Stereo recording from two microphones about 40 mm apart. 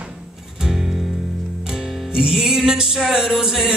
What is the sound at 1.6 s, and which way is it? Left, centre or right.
Music, centre.